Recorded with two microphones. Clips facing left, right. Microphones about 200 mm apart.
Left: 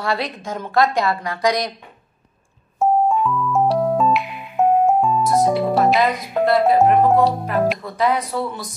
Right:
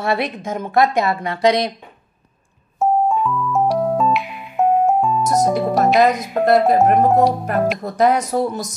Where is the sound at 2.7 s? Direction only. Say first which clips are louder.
Even; centre (ahead or behind).